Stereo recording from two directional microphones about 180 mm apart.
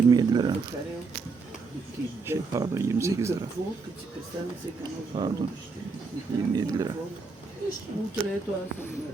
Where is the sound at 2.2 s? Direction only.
15° right (ahead or behind).